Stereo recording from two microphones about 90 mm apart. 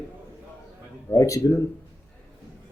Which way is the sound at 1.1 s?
40° left (ahead or behind).